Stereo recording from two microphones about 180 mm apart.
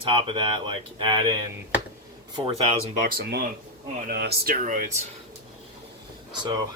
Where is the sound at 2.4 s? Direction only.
30° right (ahead or behind).